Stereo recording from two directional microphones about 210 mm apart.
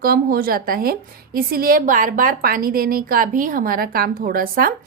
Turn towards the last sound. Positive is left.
turn(degrees=-45)  # may be behind; listen again after turning